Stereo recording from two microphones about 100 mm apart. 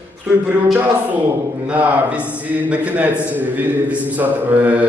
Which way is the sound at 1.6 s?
15° right (ahead or behind).